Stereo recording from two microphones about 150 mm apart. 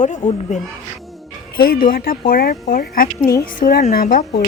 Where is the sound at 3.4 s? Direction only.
65° left (ahead or behind).